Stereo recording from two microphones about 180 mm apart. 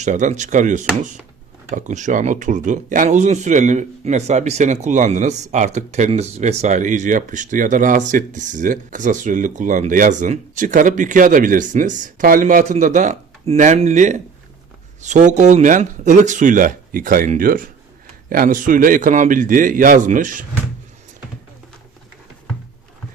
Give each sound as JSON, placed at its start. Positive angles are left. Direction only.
{"t": 0.0, "sound": "speech", "side_deg": -40}